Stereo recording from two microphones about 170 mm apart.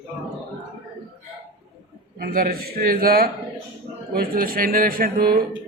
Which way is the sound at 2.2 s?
60° right (ahead or behind).